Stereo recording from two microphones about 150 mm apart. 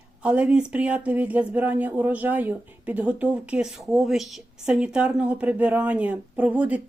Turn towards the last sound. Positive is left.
turn(degrees=-10)  # may be behind; listen again after turning